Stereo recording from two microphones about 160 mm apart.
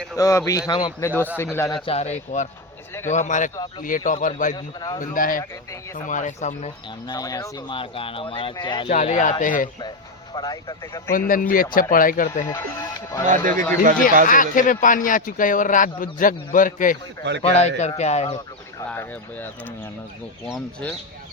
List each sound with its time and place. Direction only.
0.2 s speech: 20° left (ahead or behind)
1.8 s speech: 40° left (ahead or behind)
4.5 s speech: 25° left (ahead or behind)
4.9 s speech: 60° left (ahead or behind)
7.1 s speech: 25° left (ahead or behind)
8.9 s speech: 50° left (ahead or behind)
10.3 s speech: 25° left (ahead or behind)
11.3 s speech: 60° left (ahead or behind)
12.5 s speech: 20° left (ahead or behind)
13.2 s speech: 55° right (ahead or behind)
13.5 s speech: 10° left (ahead or behind)
14.3 s speech: 55° left (ahead or behind)
17.4 s a man's voice: 40° left (ahead or behind)
18.9 s speech: 10° left (ahead or behind)